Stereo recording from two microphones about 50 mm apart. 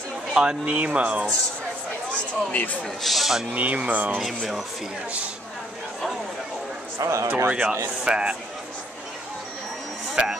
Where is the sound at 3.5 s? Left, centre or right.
Right.